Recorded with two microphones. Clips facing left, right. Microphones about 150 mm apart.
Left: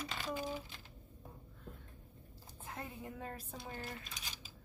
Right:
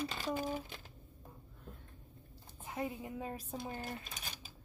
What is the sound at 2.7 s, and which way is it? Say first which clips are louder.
A woman's voice: right 6 dB; 15° right (ahead or behind).